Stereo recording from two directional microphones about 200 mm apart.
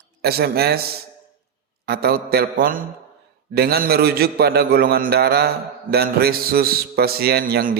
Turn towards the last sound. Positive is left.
turn(degrees=-50)  # may be behind; listen again after turning